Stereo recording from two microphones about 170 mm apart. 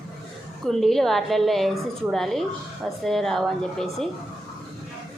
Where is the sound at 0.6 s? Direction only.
Centre (ahead or behind).